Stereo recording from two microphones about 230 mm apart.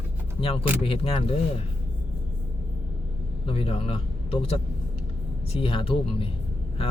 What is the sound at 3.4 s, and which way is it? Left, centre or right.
A man's voice, left.